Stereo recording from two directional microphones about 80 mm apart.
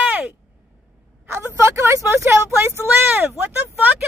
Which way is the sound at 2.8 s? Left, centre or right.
Right.